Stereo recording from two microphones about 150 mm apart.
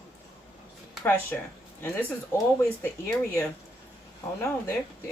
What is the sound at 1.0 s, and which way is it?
Speech, 10° left (ahead or behind).